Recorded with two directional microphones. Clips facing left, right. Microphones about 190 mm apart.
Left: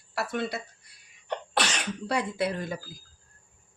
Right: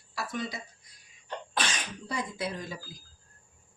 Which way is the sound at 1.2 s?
70° left (ahead or behind).